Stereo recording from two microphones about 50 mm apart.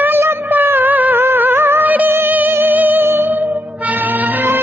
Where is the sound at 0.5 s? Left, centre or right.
Right.